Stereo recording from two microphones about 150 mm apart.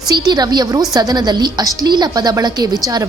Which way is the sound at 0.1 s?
25° right (ahead or behind).